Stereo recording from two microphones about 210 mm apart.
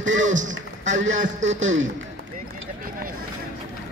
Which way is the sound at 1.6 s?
65° right (ahead or behind).